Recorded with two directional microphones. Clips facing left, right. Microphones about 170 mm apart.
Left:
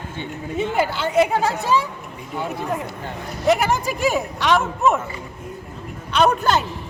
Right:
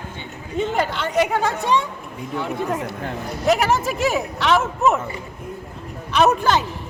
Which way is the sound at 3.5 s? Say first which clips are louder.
Even; centre (ahead or behind).